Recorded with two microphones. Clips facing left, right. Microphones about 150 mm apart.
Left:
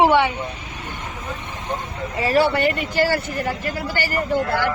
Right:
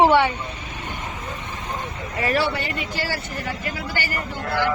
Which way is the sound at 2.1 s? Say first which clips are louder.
Left 2 dB; 30° left (ahead or behind).